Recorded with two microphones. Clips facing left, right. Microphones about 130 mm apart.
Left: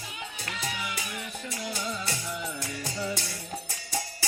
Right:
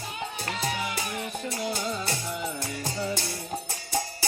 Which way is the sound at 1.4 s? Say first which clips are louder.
Right 3 dB; 30° right (ahead or behind).